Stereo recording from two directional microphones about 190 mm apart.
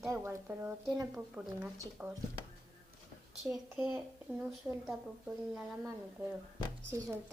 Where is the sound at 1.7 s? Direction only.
15° right (ahead or behind).